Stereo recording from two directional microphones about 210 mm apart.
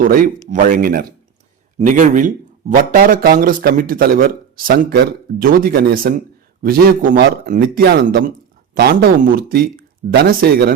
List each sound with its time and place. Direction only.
0.0 s a man's voice: 40° right (ahead or behind)